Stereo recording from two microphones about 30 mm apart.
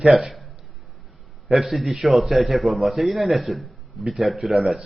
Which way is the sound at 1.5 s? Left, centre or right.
Centre.